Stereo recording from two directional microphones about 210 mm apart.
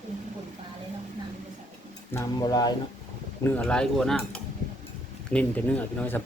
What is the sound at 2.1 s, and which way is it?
Speech, 20° left (ahead or behind).